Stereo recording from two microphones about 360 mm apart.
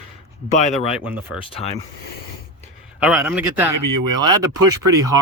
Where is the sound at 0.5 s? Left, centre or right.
Centre.